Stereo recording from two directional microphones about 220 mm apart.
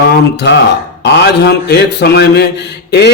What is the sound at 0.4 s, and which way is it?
A man's voice, 50° left (ahead or behind).